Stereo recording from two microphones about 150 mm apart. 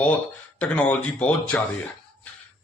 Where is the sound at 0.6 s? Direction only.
10° left (ahead or behind).